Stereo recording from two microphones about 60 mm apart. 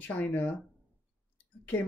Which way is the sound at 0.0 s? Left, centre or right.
Left.